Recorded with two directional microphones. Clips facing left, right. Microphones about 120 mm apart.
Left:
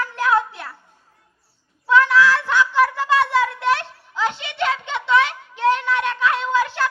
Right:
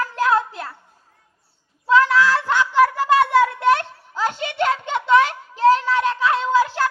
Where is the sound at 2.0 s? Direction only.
40° right (ahead or behind).